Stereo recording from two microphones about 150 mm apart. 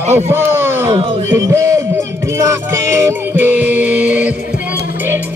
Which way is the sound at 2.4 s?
20° right (ahead or behind).